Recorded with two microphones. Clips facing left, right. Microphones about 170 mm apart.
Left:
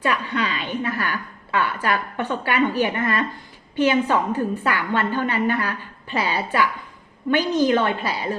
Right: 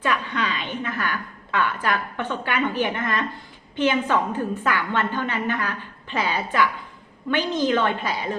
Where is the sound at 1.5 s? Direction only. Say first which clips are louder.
Left 1 dB; 40° left (ahead or behind).